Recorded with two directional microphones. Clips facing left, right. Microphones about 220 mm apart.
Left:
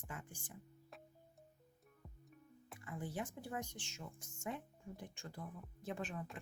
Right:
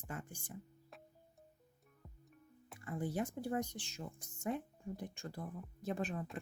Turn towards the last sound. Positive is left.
turn(degrees=-40)  # may be behind; listen again after turning